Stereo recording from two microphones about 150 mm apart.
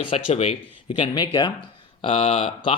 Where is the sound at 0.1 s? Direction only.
35° left (ahead or behind).